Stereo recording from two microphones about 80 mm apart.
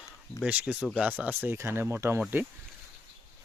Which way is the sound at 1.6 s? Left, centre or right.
Right.